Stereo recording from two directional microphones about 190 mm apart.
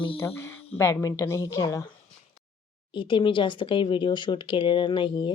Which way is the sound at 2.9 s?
25° left (ahead or behind).